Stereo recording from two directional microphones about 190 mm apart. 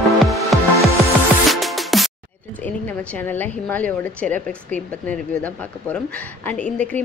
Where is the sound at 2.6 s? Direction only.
10° left (ahead or behind).